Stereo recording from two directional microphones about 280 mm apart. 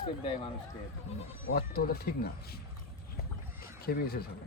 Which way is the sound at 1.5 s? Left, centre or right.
Left.